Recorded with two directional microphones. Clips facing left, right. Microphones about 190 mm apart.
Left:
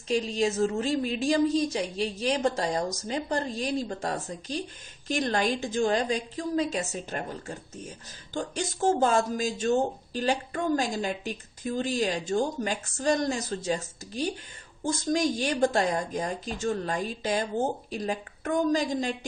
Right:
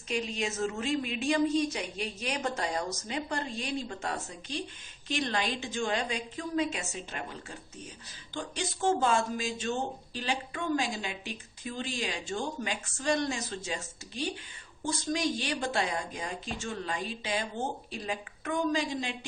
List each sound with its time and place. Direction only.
0.1 s a woman's voice: 35° left (ahead or behind)